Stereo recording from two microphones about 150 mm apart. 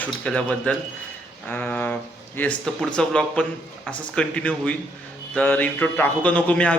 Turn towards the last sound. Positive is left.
turn(degrees=10)  # may be behind; listen again after turning